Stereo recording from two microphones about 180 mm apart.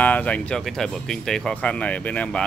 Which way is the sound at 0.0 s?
10° left (ahead or behind).